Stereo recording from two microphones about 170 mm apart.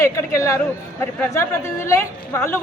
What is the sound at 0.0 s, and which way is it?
A woman's voice, 15° left (ahead or behind).